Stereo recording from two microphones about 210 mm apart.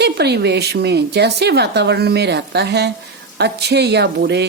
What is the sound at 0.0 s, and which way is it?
Speech, 50° right (ahead or behind).